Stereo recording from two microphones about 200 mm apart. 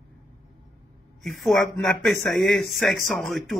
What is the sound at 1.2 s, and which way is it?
Speech, centre (ahead or behind).